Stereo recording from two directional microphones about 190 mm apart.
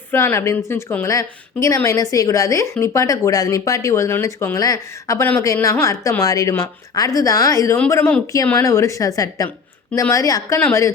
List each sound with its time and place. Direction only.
0.1 s a woman's voice: 10° left (ahead or behind)